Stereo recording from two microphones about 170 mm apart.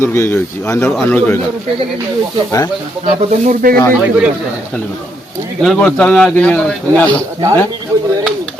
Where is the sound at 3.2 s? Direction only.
45° right (ahead or behind).